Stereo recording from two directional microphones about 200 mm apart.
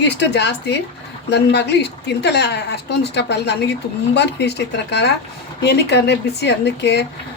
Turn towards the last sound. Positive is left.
turn(degrees=60)  # may be behind; listen again after turning